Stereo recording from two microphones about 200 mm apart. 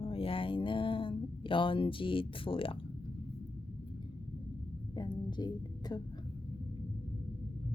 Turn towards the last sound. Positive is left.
turn(degrees=20)  # may be behind; listen again after turning